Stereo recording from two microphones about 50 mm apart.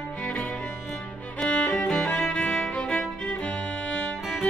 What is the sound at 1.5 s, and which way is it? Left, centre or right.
Music, left.